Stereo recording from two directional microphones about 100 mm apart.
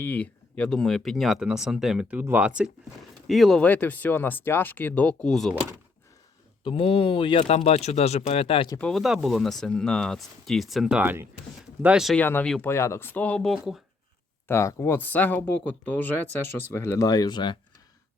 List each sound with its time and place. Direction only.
0.0 s speech: 15° left (ahead or behind); by 2.7 s 10° right (ahead or behind)
3.2 s speech: centre (ahead or behind)
3.6 s speech: 15° left (ahead or behind)
6.7 s speech: 65° left (ahead or behind)
8.9 s speech: centre (ahead or behind)
11.0 s speech: 20° right (ahead or behind)
12.1 s speech: 20° left (ahead or behind)
13.4 s speech: centre (ahead or behind)
14.4 s speech: 30° left (ahead or behind); by 17.6 s 50° left (ahead or behind)